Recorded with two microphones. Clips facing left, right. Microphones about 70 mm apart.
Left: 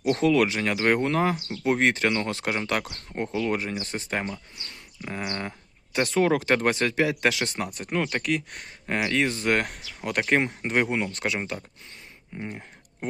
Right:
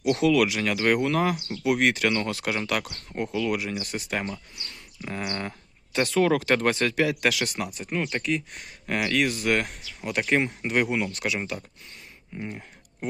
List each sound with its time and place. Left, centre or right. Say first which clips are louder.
0.0 s speech: even; left
7.7 s speech: left 2 dB; left
8.6 s speech: even; left
9.5 s speech: even; left
10.7 s speech: even; left
13.0 s speech: even; left